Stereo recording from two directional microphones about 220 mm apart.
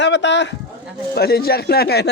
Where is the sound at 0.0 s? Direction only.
55° left (ahead or behind).